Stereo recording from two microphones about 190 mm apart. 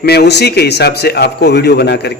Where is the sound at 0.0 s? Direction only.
60° left (ahead or behind).